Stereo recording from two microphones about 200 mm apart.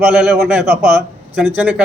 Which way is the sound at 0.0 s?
Centre (ahead or behind).